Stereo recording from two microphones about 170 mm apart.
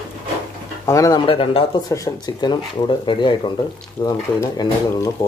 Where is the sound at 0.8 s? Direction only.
20° left (ahead or behind).